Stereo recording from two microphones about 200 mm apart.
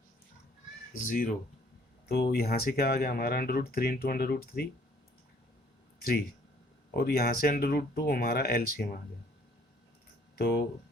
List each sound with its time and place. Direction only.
1.0 s speech: 45° left (ahead or behind)
6.0 s speech: 50° left (ahead or behind)
10.3 s speech: 50° left (ahead or behind)